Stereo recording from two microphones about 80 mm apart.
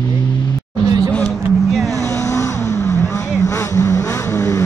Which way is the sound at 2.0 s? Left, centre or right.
Left.